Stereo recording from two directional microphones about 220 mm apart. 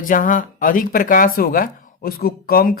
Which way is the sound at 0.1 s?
40° left (ahead or behind).